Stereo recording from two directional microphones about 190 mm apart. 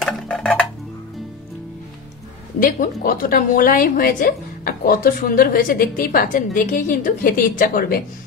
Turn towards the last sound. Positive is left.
turn(degrees=45)  # may be behind; listen again after turning